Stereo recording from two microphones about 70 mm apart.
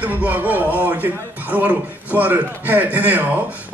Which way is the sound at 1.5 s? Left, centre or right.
Right.